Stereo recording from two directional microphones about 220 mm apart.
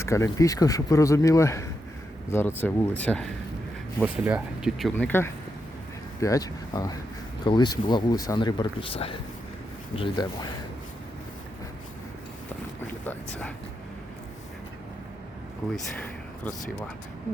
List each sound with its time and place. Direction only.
0.0 s speech: 15° left (ahead or behind)
4.0 s speech: 5° right (ahead or behind); by 10.5 s 20° left (ahead or behind)
12.9 s a sound: 10° left (ahead or behind)
15.7 s speech: 5° left (ahead or behind)